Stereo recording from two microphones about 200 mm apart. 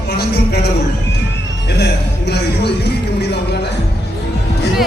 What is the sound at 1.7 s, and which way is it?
Music, 55° left (ahead or behind).